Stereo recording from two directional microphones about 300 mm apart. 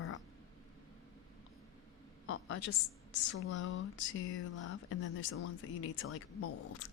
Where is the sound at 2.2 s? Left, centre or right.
Left.